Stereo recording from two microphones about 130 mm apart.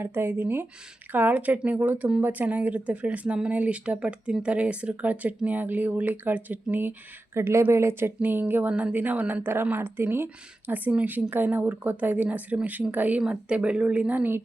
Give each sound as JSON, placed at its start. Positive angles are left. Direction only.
{"t": 0.0, "sound": "speech", "side_deg": -15}